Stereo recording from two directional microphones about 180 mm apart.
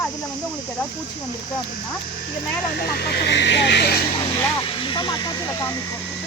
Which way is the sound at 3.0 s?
65° left (ahead or behind).